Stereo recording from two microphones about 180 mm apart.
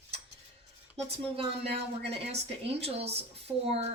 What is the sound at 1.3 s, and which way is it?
A woman's voice, 35° right (ahead or behind).